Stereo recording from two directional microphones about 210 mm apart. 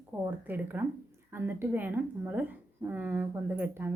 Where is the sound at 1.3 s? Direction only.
10° right (ahead or behind).